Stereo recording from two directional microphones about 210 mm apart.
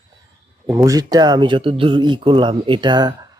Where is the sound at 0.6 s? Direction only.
15° right (ahead or behind).